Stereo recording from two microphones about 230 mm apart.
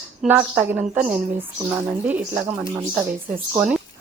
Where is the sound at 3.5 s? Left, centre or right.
Centre.